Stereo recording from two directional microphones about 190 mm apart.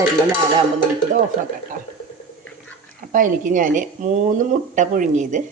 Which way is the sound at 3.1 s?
45° right (ahead or behind).